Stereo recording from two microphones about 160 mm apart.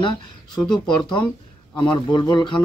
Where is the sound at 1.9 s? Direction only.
25° left (ahead or behind).